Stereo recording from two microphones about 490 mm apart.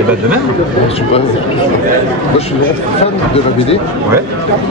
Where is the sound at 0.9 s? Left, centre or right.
Centre.